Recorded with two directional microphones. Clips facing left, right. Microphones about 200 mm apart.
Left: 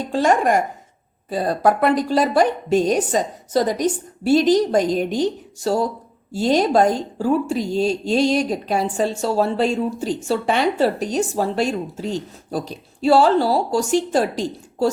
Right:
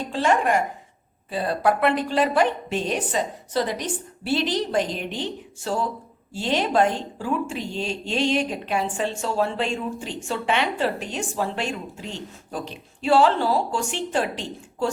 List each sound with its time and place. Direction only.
0.1 s a woman's voice: 45° left (ahead or behind)